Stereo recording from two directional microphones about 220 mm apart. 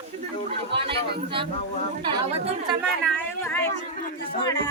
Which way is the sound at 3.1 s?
10° left (ahead or behind).